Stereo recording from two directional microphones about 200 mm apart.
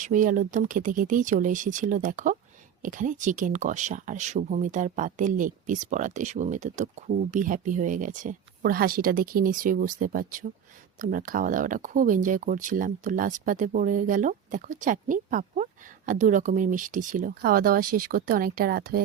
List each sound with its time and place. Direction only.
0.0 s speech: 40° right (ahead or behind)